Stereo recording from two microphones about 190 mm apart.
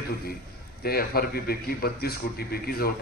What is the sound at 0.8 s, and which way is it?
A man's voice, 55° left (ahead or behind).